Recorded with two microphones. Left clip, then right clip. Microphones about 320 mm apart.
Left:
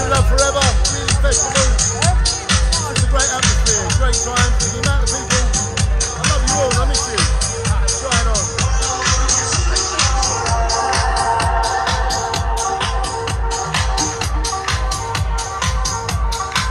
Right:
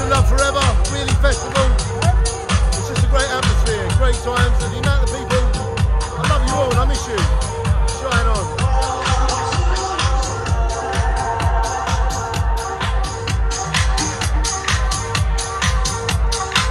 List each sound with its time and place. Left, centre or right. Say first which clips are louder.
0.1 s music: even; centre
1.5 s music: left 2 dB; centre
8.1 s music: right 1 dB; centre
10.8 s music: left 2 dB; left